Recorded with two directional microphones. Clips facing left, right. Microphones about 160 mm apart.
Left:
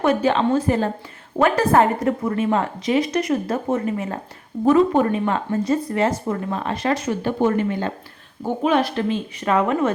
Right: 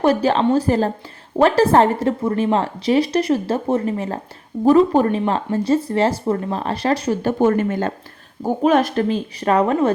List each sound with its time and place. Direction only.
0.0 s a woman's voice: 35° right (ahead or behind)
7.4 s a woman's voice: 45° right (ahead or behind)